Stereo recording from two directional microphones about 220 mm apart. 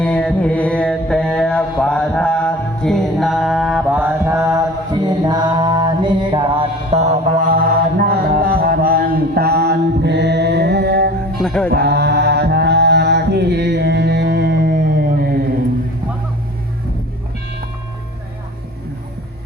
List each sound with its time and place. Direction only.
0.0 s mantra: 5° left (ahead or behind); by 11.1 s 50° right (ahead or behind)
11.3 s music: 5° left (ahead or behind)
11.7 s mantra: 45° right (ahead or behind)